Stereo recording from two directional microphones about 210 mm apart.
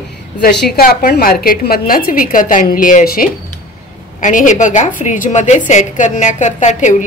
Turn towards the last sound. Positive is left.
turn(degrees=35)  # may be behind; listen again after turning